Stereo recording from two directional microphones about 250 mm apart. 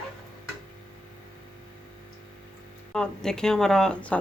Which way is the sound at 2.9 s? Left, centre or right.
Centre.